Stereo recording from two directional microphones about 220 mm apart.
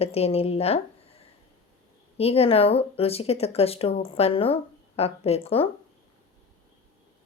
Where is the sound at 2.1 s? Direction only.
25° left (ahead or behind).